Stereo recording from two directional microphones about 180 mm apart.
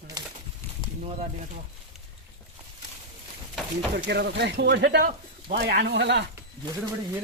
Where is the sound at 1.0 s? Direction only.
35° right (ahead or behind).